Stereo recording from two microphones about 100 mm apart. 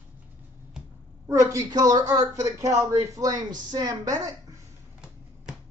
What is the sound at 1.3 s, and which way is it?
Speech, 30° right (ahead or behind).